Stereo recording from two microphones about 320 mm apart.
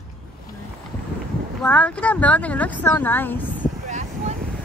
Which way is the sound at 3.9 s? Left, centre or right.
Right.